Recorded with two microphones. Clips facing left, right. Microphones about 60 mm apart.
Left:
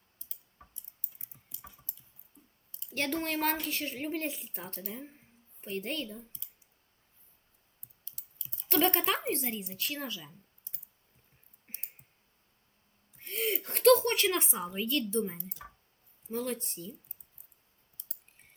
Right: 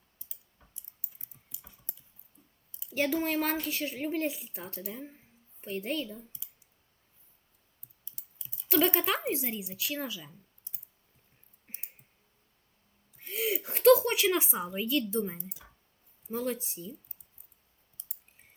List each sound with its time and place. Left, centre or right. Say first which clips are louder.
0.6 s a sound: left 8 dB; left
2.8 s a woman's voice: right 4 dB; centre
8.0 s clicking: left 1 dB; centre
8.7 s a woman's voice: right 1 dB; centre
13.1 s a woman's voice: right 1 dB; centre